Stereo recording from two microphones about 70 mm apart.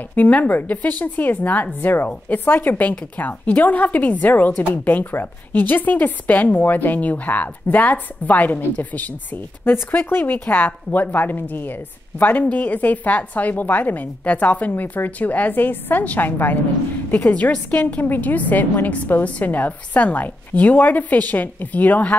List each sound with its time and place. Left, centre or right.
0.1 s speech: left